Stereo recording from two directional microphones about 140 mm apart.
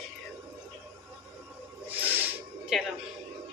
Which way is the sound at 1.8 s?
15° right (ahead or behind).